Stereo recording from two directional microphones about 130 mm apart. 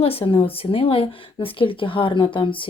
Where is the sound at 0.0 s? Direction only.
45° left (ahead or behind).